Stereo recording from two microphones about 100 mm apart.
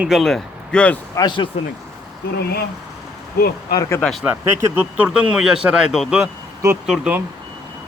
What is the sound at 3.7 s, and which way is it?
Speech, 30° left (ahead or behind).